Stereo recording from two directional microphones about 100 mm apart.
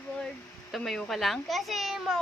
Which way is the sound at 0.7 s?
5° left (ahead or behind).